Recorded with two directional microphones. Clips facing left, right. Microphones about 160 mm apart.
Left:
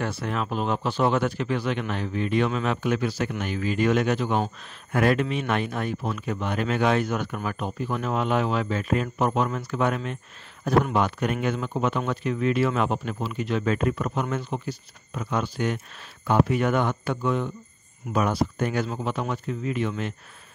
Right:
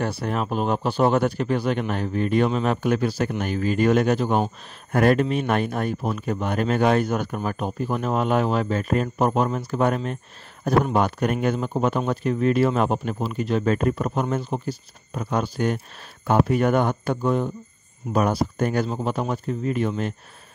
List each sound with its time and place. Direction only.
0.0 s speech: 35° right (ahead or behind)